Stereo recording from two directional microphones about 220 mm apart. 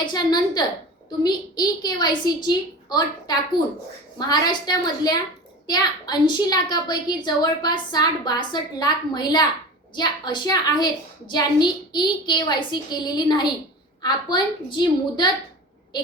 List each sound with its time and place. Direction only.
0.0 s a woman's voice: 20° left (ahead or behind)